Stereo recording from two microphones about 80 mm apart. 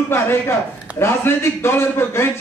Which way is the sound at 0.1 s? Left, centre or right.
Left.